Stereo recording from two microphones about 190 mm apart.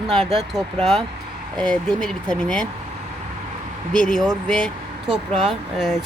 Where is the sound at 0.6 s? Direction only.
Centre (ahead or behind).